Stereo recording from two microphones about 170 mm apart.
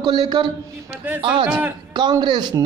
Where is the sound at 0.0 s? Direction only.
25° right (ahead or behind).